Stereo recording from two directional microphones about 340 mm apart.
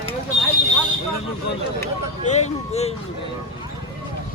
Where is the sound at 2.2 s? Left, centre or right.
Centre.